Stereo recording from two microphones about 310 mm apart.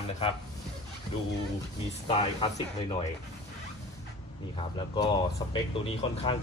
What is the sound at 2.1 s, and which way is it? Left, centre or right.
Speech, centre.